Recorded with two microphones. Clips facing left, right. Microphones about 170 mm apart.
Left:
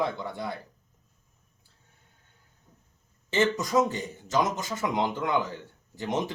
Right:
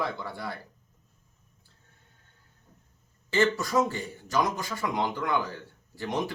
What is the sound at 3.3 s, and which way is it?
Speech, 20° left (ahead or behind).